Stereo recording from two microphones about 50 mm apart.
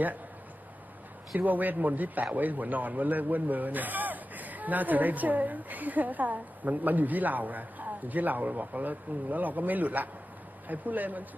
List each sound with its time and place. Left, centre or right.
1.4 s a man's voice: right